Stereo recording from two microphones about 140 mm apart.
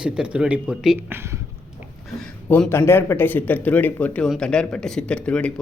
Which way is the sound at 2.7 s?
15° left (ahead or behind).